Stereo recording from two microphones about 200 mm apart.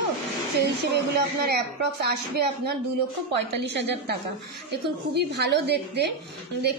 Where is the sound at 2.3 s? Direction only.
55° right (ahead or behind).